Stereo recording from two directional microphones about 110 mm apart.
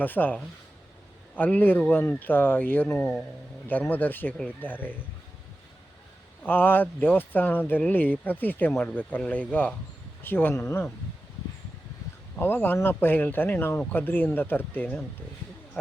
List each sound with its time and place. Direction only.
0.0 s speech: 15° left (ahead or behind)
1.4 s speech: 15° left (ahead or behind)
6.4 s speech: 15° left (ahead or behind)
12.4 s speech: 20° left (ahead or behind)